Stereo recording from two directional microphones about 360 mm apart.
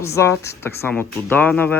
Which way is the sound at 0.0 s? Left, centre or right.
Centre.